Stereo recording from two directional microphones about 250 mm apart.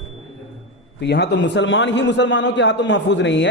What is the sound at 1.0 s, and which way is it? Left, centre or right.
A man's voice, left.